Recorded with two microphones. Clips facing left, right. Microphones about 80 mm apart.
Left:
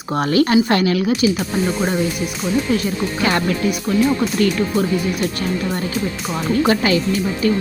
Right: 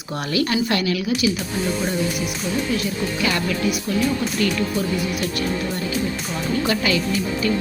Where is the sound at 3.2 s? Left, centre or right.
Left.